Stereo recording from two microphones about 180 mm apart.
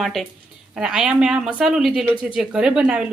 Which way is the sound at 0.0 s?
Centre (ahead or behind).